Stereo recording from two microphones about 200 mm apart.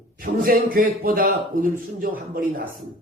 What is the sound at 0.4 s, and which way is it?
A man's voice, 45° right (ahead or behind).